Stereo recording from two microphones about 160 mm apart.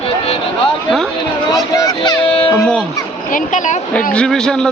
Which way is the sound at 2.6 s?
5° left (ahead or behind).